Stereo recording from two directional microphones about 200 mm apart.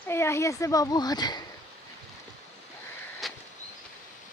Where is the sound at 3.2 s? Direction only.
Centre (ahead or behind).